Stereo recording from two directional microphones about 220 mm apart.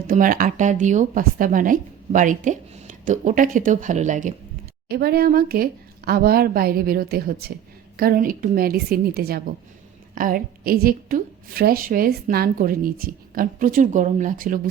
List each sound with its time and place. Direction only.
0.1 s a woman's voice: 40° right (ahead or behind)
4.9 s a woman's voice: 45° right (ahead or behind)